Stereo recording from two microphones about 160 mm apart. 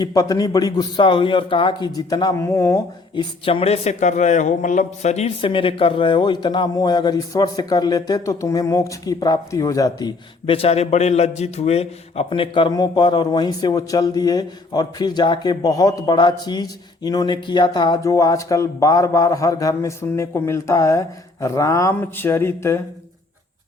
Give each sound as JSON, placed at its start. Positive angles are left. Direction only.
{"t": 0.0, "sound": "speech", "side_deg": 25}
{"t": 3.4, "sound": "speech", "side_deg": 35}